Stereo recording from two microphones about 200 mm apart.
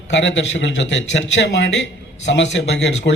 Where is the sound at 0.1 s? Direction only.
65° left (ahead or behind).